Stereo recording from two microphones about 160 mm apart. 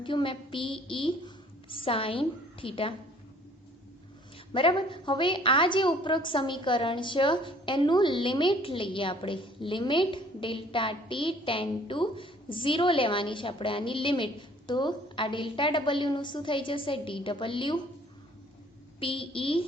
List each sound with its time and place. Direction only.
0.0 s a woman's voice: 30° left (ahead or behind)
4.5 s a woman's voice: 30° left (ahead or behind)
18.9 s a woman's voice: 35° left (ahead or behind)